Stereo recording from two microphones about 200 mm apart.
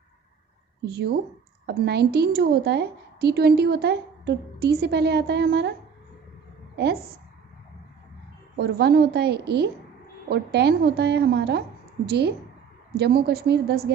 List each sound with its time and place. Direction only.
0.9 s a woman's voice: 55° right (ahead or behind)
6.7 s a woman's voice: 55° right (ahead or behind)
8.5 s a woman's voice: 55° right (ahead or behind)